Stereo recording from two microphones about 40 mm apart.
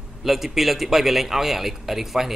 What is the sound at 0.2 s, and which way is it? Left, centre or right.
Speech, centre.